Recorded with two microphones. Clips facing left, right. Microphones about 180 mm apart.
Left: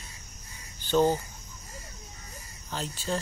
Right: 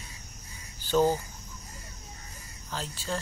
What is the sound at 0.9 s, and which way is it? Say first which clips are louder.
Speech: left 1 dB; 5° right (ahead or behind).